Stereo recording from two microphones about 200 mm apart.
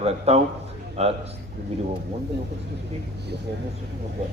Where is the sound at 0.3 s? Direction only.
30° right (ahead or behind).